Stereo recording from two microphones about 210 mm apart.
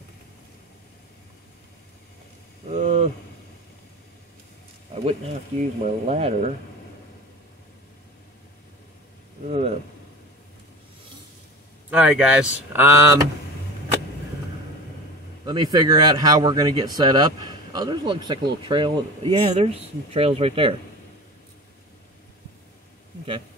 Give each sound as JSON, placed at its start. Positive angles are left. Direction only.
{"t": 2.7, "sound": "a sound", "side_deg": -35}
{"t": 5.0, "sound": "speech", "side_deg": -30}
{"t": 11.9, "sound": "speech", "side_deg": -5}
{"t": 15.4, "sound": "speech", "side_deg": -20}